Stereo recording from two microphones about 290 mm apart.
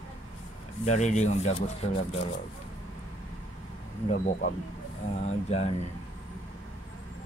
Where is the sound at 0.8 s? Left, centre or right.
Left.